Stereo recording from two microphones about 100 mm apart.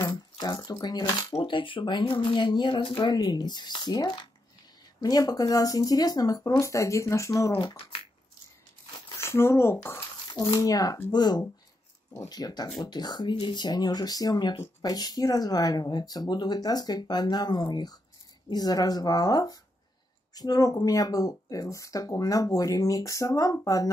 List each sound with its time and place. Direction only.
0.0 s a sound: 40° left (ahead or behind)
1.3 s speech: 55° left (ahead or behind); by 7.5 s 30° left (ahead or behind)
9.2 s speech: 25° left (ahead or behind)
10.3 s speech: 45° left (ahead or behind)